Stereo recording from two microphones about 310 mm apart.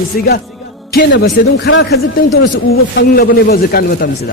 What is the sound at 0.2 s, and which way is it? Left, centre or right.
A man's voice, left.